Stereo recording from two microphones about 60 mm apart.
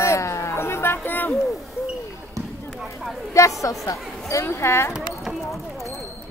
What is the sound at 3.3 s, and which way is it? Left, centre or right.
A woman's voice, left.